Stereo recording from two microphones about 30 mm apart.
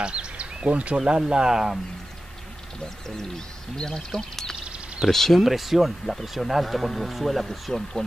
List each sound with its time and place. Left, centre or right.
0.0 s a sound: right
0.9 s speech: right
3.7 s speech: left
5.4 s speech: centre
7.7 s speech: centre